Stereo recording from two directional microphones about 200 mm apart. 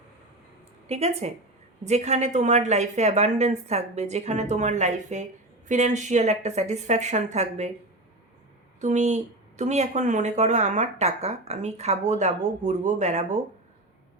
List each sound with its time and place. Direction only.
0.9 s speech: 30° right (ahead or behind)
8.8 s speech: 35° right (ahead or behind)